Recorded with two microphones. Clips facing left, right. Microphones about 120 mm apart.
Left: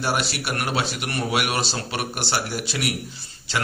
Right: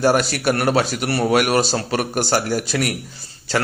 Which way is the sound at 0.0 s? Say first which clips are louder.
Right 8 dB; 45° right (ahead or behind).